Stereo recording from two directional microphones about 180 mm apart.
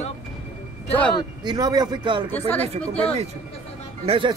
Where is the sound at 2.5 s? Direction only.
10° left (ahead or behind).